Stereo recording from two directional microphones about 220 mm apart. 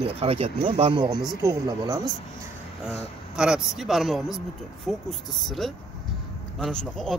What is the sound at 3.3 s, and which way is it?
Speech, 5° right (ahead or behind).